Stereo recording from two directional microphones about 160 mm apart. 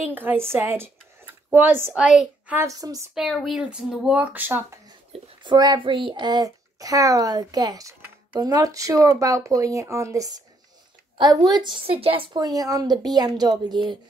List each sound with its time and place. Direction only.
0.1 s speech: 10° right (ahead or behind)
3.2 s speech: centre (ahead or behind)
5.1 s a woman's voice: 30° right (ahead or behind)